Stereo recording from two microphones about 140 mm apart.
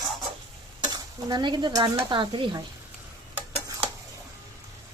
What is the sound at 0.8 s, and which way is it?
Stir, 30° right (ahead or behind).